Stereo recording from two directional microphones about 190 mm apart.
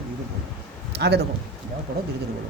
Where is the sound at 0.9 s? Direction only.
60° right (ahead or behind).